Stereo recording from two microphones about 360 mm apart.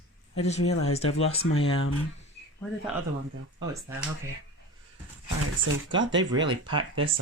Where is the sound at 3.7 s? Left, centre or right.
Centre.